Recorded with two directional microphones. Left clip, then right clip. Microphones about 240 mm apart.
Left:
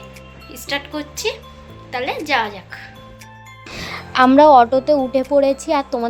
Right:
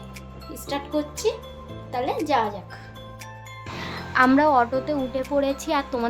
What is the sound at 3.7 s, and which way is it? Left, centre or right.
Music, left.